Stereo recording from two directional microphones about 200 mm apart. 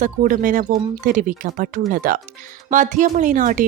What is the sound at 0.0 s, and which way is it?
A woman's voice, 40° right (ahead or behind).